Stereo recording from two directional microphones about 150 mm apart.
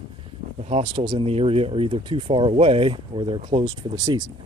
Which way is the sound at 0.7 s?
35° right (ahead or behind).